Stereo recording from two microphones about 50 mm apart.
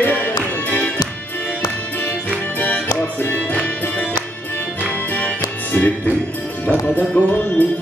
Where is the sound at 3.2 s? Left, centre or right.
Left.